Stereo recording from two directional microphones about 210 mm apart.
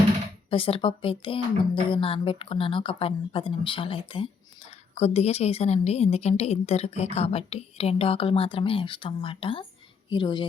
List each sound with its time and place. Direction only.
0.5 s speech: 25° left (ahead or behind)